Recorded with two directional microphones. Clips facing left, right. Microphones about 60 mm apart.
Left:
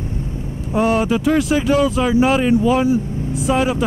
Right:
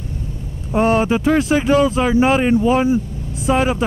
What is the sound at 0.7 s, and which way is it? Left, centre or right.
Speech, right.